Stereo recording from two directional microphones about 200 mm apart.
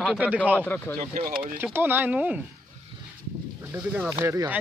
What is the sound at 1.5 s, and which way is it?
Speech, 10° right (ahead or behind).